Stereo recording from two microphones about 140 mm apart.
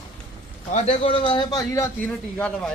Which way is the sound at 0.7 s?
55° left (ahead or behind).